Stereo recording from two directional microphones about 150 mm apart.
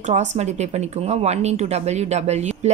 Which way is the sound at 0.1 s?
50° right (ahead or behind).